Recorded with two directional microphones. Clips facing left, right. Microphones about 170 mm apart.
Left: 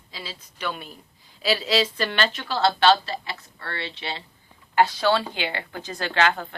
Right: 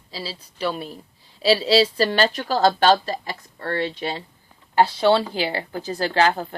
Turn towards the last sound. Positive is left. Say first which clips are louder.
# right 3 dB
turn(degrees=-35)  # may be behind; listen again after turning